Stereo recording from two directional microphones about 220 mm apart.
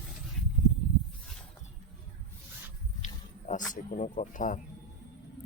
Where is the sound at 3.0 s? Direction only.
35° left (ahead or behind).